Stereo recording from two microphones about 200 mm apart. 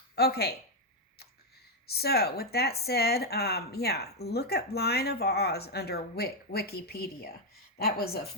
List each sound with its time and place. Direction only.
0.2 s a woman's voice: 50° left (ahead or behind)
1.9 s a woman's voice: 50° left (ahead or behind)